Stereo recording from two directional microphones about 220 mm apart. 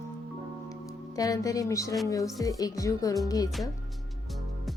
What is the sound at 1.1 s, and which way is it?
Speech, 15° left (ahead or behind).